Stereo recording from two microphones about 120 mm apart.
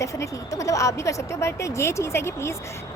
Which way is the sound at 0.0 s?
25° left (ahead or behind).